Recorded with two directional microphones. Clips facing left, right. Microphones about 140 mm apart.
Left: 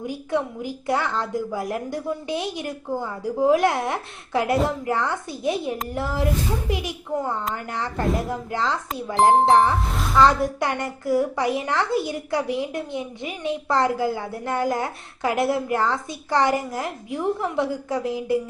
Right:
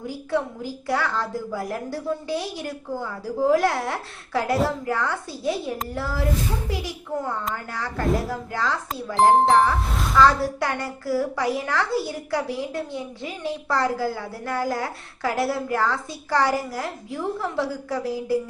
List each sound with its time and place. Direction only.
0.0 s a woman's voice: 20° left (ahead or behind)
9.9 s music: centre (ahead or behind)
10.2 s a woman's voice: 20° left (ahead or behind)